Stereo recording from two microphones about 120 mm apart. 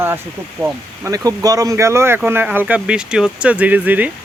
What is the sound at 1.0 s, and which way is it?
Speech, 30° right (ahead or behind).